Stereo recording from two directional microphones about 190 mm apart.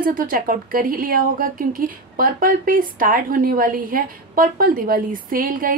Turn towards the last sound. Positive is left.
turn(degrees=-45)  # may be behind; listen again after turning